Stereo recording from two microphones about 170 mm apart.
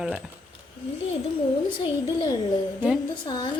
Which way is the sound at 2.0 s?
25° left (ahead or behind).